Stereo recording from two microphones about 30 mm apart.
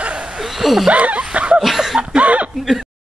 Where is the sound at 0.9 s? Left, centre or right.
Right.